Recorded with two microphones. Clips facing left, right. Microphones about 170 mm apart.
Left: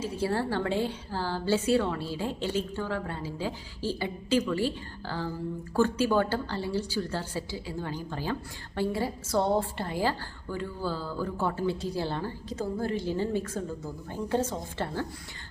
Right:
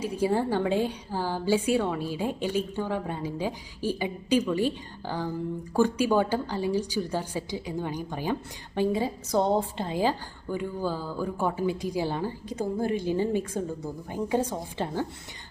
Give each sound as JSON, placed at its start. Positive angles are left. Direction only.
{"t": 0.0, "sound": "a woman's voice", "side_deg": -15}